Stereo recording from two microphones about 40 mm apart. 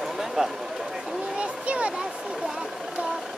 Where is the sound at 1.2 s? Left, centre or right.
Right.